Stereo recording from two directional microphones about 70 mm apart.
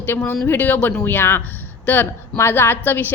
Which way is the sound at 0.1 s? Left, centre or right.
Left.